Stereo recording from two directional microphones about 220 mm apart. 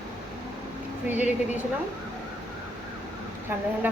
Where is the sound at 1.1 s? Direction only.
10° right (ahead or behind).